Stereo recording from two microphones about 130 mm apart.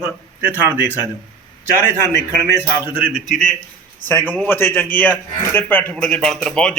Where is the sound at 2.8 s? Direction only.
15° right (ahead or behind).